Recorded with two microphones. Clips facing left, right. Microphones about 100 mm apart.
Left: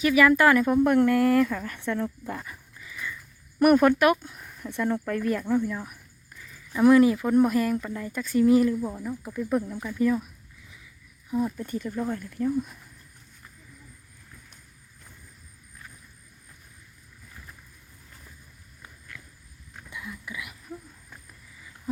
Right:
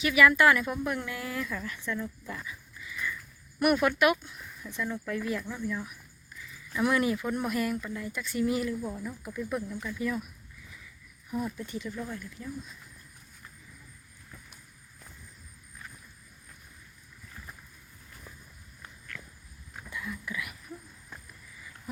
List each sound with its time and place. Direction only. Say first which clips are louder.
0.0 s speech: left 3 dB; 35° left (ahead or behind)
0.9 s speech: left 15 dB; 55° left (ahead or behind)
3.6 s speech: left 6 dB; 40° left (ahead or behind)
6.7 s speech: left 9 dB; 30° left (ahead or behind)
11.3 s speech: left 6 dB; 25° left (ahead or behind)
11.5 s speech: left 6 dB; 45° left (ahead or behind)
12.3 s speech: left 13 dB; 55° left (ahead or behind)
18.8 s a sound: right 1 dB; 15° left (ahead or behind)